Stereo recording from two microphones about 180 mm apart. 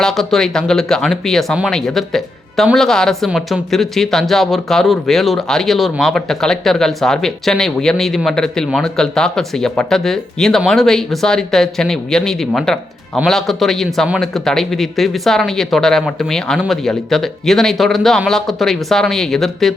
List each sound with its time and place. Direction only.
0.0 s speech: centre (ahead or behind)